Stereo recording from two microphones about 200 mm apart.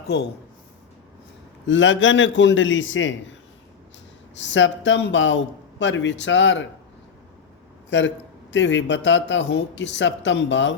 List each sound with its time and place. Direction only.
0.1 s a man's voice: 60° left (ahead or behind)
1.6 s a man's voice: 70° left (ahead or behind)
4.4 s a man's voice: 65° left (ahead or behind)
7.9 s a man's voice: 60° left (ahead or behind)